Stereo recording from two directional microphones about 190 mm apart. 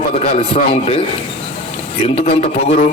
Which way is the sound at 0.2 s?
35° left (ahead or behind).